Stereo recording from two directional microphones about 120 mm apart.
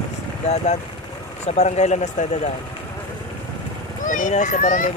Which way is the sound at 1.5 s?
70° left (ahead or behind).